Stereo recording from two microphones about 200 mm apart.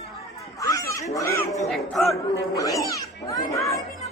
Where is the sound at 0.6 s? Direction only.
15° left (ahead or behind).